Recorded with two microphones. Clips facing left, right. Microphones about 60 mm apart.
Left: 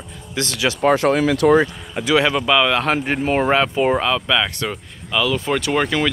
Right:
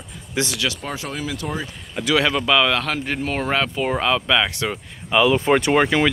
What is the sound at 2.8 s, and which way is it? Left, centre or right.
Speech, left.